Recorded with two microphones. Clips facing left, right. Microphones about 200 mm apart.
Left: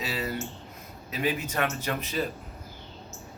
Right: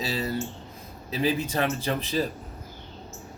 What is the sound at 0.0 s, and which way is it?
A man's voice, 30° right (ahead or behind).